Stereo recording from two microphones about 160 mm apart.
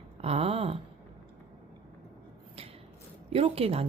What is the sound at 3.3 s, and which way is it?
Speech, 40° right (ahead or behind).